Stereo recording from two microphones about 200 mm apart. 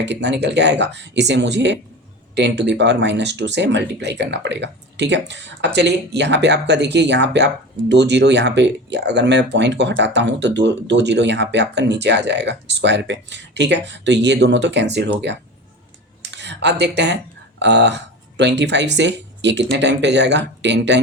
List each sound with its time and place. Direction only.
0.0 s speech: 60° right (ahead or behind)
16.3 s speech: 60° right (ahead or behind)